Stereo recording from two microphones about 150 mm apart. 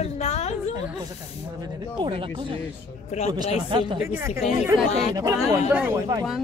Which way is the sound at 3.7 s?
35° right (ahead or behind).